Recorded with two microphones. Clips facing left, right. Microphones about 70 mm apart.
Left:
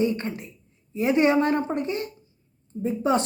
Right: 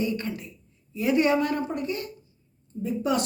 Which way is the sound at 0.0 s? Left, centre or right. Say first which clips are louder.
Left 3 dB; left.